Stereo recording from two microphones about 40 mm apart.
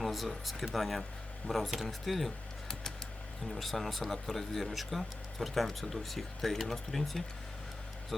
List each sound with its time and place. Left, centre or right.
0.0 s speech: centre
3.5 s speech: centre